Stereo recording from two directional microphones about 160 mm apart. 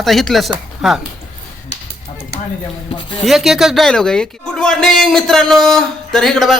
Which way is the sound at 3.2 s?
Centre (ahead or behind).